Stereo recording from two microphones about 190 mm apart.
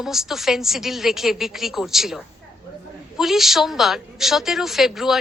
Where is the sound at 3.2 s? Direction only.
Centre (ahead or behind).